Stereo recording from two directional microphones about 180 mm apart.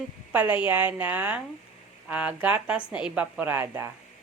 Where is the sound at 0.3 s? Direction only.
10° right (ahead or behind).